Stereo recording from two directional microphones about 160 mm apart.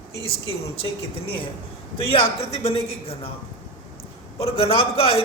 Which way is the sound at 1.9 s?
35° left (ahead or behind).